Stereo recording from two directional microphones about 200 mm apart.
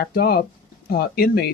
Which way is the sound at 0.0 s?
50° left (ahead or behind).